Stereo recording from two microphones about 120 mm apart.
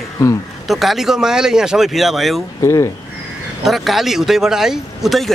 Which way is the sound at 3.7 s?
Centre (ahead or behind).